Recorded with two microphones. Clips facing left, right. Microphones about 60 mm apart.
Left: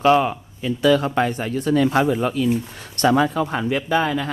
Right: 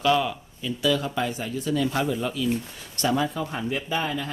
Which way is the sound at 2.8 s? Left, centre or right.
Left.